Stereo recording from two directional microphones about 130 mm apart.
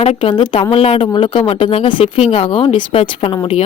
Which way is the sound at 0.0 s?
40° left (ahead or behind).